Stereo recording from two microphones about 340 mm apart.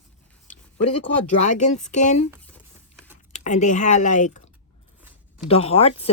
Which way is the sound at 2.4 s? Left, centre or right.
Centre.